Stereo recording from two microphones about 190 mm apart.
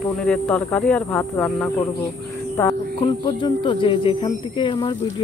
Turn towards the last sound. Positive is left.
turn(degrees=25)  # may be behind; listen again after turning